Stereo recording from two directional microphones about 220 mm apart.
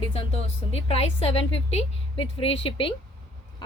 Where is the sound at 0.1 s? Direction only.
25° left (ahead or behind).